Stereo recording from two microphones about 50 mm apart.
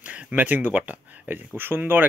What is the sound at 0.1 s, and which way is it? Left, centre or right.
Speech, right.